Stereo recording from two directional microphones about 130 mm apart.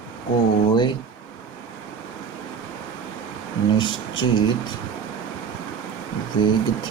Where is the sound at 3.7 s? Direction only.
35° left (ahead or behind).